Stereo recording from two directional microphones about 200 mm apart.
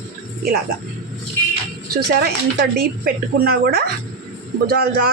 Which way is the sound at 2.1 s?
50° right (ahead or behind).